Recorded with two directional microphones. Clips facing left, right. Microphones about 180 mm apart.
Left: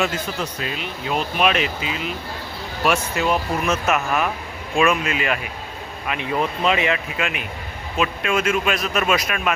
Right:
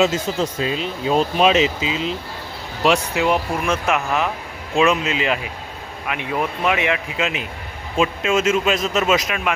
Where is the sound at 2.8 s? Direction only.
15° right (ahead or behind).